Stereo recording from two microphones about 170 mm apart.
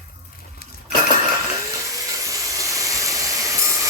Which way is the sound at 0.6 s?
65° left (ahead or behind).